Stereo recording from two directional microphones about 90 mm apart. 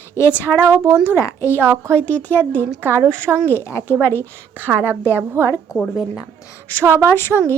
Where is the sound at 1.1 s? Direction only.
30° left (ahead or behind).